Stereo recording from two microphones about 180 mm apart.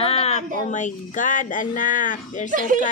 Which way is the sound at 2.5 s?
45° right (ahead or behind).